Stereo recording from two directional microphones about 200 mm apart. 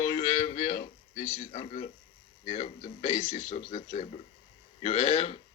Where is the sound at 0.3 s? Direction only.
40° left (ahead or behind).